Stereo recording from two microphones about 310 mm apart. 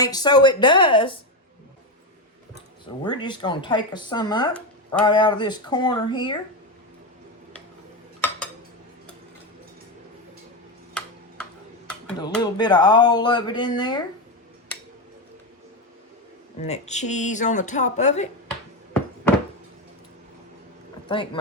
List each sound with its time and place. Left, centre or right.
0.0 s speech: centre
3.0 s speech: centre
11.9 s speech: centre
16.6 s speech: left
21.1 s speech: centre